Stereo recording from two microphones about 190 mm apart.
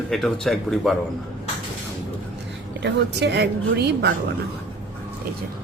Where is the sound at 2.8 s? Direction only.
65° right (ahead or behind).